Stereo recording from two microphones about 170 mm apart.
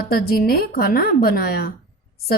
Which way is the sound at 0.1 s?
60° left (ahead or behind).